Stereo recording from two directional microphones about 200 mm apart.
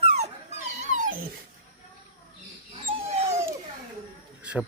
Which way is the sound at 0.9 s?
40° right (ahead or behind).